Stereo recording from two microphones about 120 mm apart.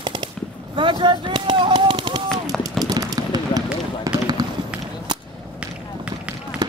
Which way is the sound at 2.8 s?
30° right (ahead or behind).